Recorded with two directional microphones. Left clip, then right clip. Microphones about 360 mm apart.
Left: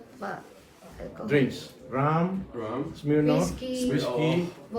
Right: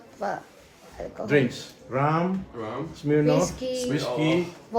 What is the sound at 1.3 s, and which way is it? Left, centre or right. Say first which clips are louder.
Speech: right 2 dB; right.